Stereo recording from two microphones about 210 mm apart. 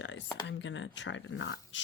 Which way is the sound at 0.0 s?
60° left (ahead or behind).